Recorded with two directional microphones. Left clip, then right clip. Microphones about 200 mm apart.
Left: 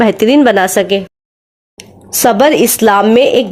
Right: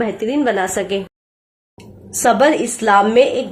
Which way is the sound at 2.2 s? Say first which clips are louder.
Left 5 dB; 40° left (ahead or behind).